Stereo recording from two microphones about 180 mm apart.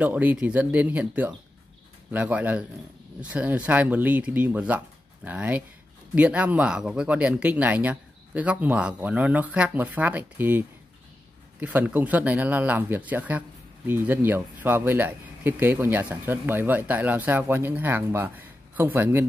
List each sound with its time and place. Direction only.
0.0 s speech: 10° right (ahead or behind)
11.6 s speech: 10° right (ahead or behind)